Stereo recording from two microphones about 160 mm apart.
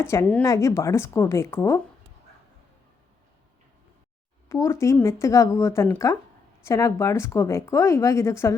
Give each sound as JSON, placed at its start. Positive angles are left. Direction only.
{"t": 0.0, "sound": "speech", "side_deg": 15}
{"t": 4.4, "sound": "a woman's voice", "side_deg": 20}